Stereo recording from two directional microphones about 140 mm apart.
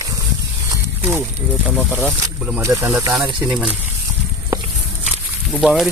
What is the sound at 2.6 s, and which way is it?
Speech, 25° right (ahead or behind).